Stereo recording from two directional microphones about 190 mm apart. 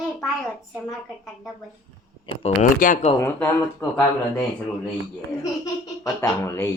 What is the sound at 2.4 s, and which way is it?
Speech, 45° left (ahead or behind).